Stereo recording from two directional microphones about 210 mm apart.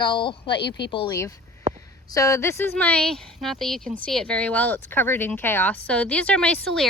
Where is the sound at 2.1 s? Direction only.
15° left (ahead or behind).